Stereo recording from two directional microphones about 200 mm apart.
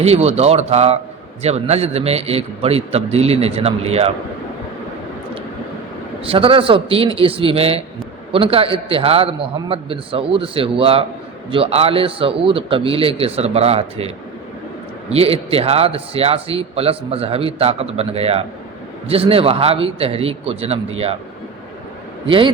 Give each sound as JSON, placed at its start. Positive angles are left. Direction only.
{"t": 0.0, "sound": "a man's voice", "side_deg": -30}
{"t": 6.2, "sound": "a man's voice", "side_deg": -25}
{"t": 15.1, "sound": "a man's voice", "side_deg": -30}
{"t": 22.3, "sound": "a man's voice", "side_deg": -25}